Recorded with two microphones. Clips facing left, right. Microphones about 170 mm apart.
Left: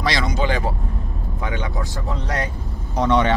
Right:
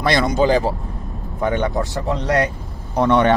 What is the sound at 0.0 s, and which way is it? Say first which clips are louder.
Speech: right 5 dB; 55° right (ahead or behind).